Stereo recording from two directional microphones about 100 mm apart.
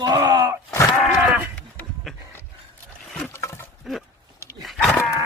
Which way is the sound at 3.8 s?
5° right (ahead or behind).